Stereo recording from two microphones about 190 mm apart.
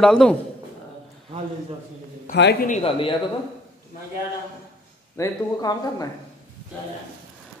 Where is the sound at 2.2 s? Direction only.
55° left (ahead or behind).